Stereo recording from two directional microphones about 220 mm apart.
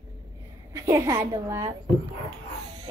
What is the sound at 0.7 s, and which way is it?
Speech, 15° right (ahead or behind).